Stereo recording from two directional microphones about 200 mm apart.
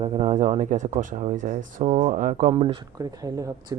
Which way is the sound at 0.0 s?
35° right (ahead or behind).